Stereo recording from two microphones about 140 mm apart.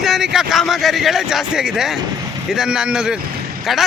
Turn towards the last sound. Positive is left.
turn(degrees=-5)  # may be behind; listen again after turning